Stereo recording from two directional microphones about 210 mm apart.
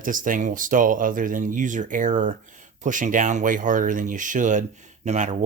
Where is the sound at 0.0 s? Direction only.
40° right (ahead or behind).